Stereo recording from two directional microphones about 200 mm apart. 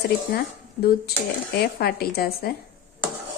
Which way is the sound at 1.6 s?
50° left (ahead or behind).